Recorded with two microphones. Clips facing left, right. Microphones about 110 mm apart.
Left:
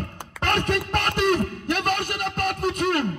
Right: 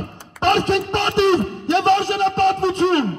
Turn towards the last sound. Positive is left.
turn(degrees=-25)  # may be behind; listen again after turning